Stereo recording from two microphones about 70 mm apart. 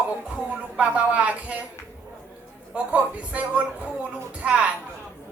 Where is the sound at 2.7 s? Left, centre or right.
Centre.